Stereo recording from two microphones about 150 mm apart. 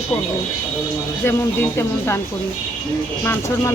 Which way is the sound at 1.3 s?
15° left (ahead or behind).